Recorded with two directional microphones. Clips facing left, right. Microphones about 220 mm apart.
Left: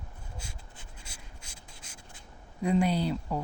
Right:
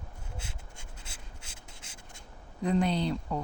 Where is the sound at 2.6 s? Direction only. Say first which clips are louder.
Left 1 dB; 10° left (ahead or behind).